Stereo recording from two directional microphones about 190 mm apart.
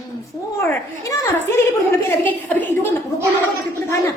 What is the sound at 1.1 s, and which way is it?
A woman's voice, 15° left (ahead or behind).